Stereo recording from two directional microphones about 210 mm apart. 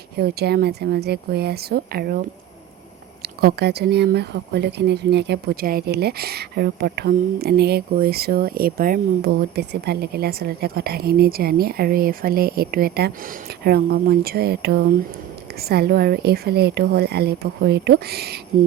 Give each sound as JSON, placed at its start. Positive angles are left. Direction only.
{"t": 0.2, "sound": "speech", "side_deg": -50}
{"t": 3.4, "sound": "speech", "side_deg": -50}